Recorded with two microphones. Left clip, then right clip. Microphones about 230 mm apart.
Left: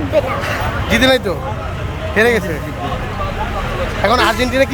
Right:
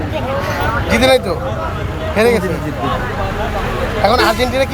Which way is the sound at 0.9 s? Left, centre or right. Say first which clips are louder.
Right 1 dB; centre.